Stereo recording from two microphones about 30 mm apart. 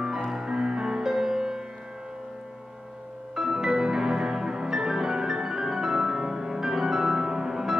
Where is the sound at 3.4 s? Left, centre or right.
Centre.